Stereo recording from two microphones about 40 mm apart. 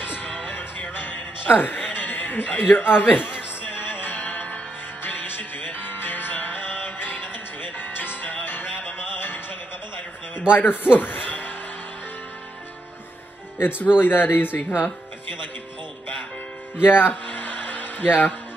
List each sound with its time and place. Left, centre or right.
0.1 s music: left
10.5 s a man's voice: left
13.6 s speech: left
16.8 s speech: left
17.1 s music: left